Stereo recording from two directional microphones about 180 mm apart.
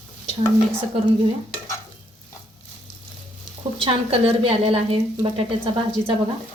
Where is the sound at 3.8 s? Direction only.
30° right (ahead or behind).